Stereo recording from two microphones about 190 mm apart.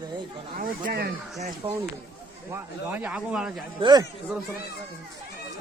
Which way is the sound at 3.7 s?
25° right (ahead or behind).